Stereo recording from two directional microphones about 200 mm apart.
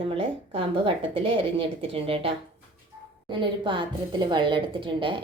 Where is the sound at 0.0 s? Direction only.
25° right (ahead or behind).